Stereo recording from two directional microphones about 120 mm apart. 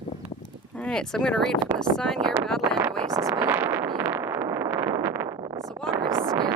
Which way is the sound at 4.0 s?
20° right (ahead or behind).